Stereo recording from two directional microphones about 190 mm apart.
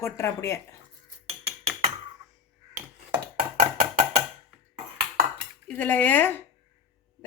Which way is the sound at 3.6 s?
40° right (ahead or behind).